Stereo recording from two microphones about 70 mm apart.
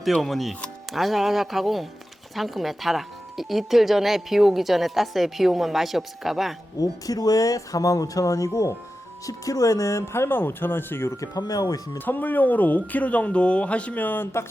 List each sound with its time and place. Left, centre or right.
0.0 s speech: centre
6.8 s speech: left
11.3 s speech: left
11.9 s speech: left